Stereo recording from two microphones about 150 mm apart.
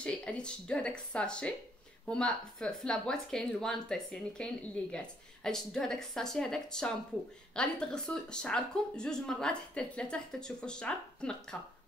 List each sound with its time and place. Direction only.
0.0 s speech: 5° left (ahead or behind)